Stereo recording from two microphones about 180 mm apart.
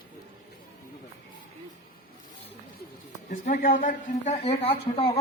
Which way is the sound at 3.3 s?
40° left (ahead or behind).